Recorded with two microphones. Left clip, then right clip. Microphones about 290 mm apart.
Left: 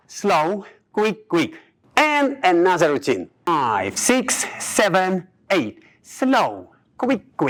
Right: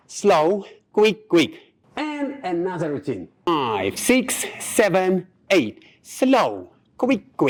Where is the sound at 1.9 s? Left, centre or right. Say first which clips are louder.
Left 11 dB; centre.